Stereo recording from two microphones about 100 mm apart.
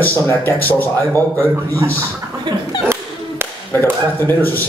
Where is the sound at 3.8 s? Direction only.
25° left (ahead or behind).